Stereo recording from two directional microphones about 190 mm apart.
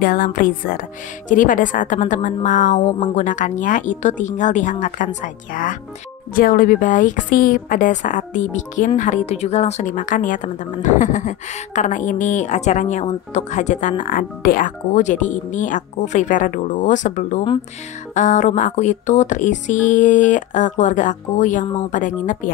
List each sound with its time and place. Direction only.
0.0 s a woman's voice: 45° left (ahead or behind)